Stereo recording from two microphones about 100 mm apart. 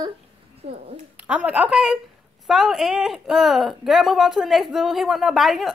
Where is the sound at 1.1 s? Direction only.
10° right (ahead or behind).